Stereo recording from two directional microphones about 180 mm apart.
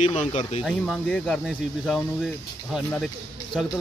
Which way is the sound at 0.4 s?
40° left (ahead or behind).